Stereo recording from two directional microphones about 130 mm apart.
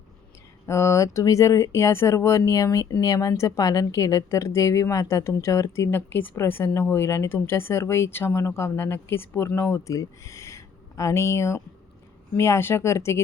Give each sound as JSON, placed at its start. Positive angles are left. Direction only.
{"t": 0.7, "sound": "speech", "side_deg": 20}